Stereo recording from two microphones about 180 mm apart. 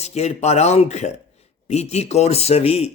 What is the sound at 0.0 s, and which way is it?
A man's voice, 35° left (ahead or behind).